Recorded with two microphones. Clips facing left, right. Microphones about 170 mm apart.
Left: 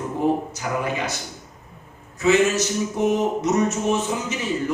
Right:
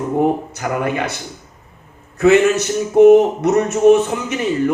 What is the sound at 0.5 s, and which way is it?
Speech, 60° right (ahead or behind).